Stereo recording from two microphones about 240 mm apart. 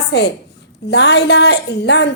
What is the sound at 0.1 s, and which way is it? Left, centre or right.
A woman's voice, left.